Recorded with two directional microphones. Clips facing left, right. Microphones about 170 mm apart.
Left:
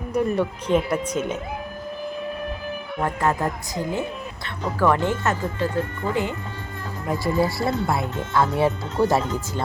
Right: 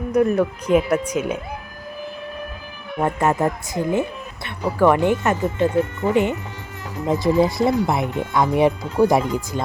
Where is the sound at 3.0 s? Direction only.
20° right (ahead or behind).